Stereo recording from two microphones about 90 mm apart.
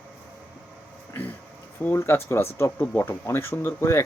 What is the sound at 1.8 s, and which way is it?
Speech, 25° left (ahead or behind).